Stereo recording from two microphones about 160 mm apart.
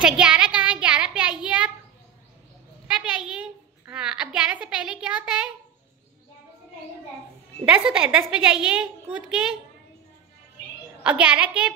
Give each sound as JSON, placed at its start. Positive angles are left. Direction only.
{"t": 0.0, "sound": "a sound", "side_deg": -5}
{"t": 2.9, "sound": "a woman's voice", "side_deg": -5}
{"t": 7.6, "sound": "a woman's voice", "side_deg": -5}
{"t": 11.1, "sound": "a woman's voice", "side_deg": -5}